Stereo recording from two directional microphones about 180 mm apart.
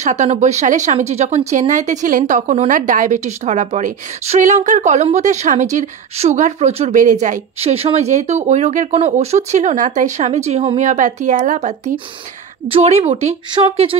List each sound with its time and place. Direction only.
0.0 s speech: 40° right (ahead or behind)